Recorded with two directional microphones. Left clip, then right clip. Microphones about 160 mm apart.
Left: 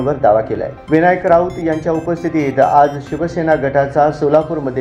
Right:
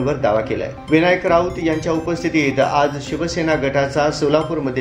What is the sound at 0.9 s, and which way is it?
Speech, 20° right (ahead or behind).